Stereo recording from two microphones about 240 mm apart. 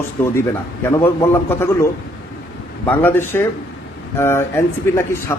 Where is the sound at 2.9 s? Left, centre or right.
Centre.